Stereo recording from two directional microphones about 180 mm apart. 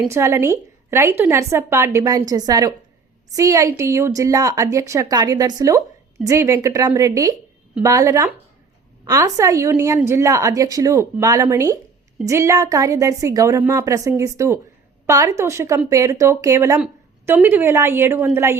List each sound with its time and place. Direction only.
0.1 s a woman's voice: 15° right (ahead or behind)